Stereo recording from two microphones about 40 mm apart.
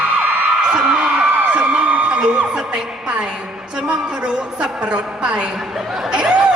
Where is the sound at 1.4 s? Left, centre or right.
Right.